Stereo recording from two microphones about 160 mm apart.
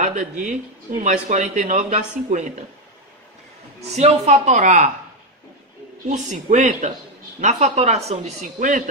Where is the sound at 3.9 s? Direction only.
45° right (ahead or behind).